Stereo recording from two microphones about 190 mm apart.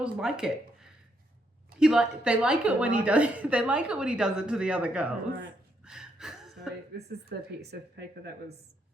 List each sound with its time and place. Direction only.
0.0 s a woman's voice: 5° right (ahead or behind)
5.8 s gasp: 5° right (ahead or behind)
6.9 s speech: 60° right (ahead or behind)